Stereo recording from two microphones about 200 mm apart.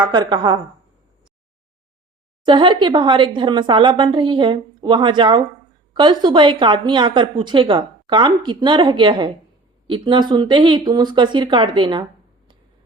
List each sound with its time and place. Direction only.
0.0 s a woman's voice: 20° right (ahead or behind)
2.4 s a woman's voice: 25° right (ahead or behind)